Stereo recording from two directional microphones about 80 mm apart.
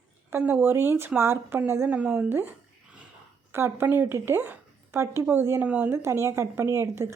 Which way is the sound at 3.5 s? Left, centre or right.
Right.